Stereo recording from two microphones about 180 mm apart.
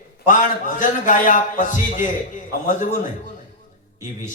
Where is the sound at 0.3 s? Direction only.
45° left (ahead or behind).